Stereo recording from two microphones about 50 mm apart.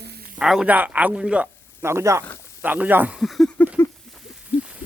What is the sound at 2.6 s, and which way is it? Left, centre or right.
Speech, right.